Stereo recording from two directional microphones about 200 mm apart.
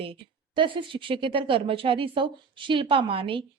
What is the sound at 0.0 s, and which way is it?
A woman's voice, 25° right (ahead or behind).